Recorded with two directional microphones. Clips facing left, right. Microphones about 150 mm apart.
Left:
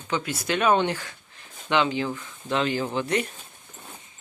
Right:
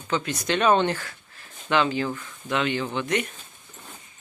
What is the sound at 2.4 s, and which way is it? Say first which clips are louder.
Speech: left 1 dB; 35° left (ahead or behind).